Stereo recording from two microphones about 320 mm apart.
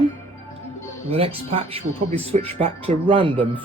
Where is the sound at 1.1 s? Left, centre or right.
Centre.